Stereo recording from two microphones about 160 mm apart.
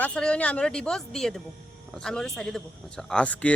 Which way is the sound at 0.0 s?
5° left (ahead or behind).